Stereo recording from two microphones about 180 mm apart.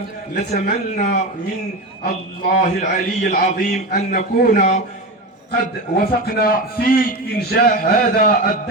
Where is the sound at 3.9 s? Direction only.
45° left (ahead or behind).